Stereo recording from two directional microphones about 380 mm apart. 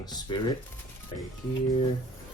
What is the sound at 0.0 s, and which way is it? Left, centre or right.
Speech, centre.